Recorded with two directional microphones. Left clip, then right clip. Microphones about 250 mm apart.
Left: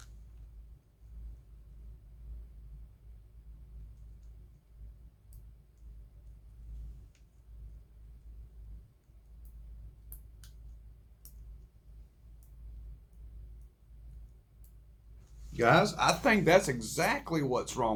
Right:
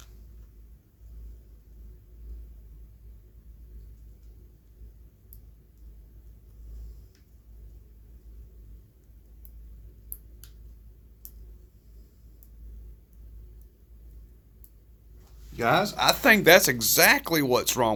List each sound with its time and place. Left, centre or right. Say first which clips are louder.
15.6 s speech: right 3 dB; right